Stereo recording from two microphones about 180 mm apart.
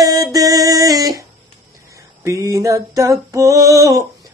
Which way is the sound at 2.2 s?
15° right (ahead or behind).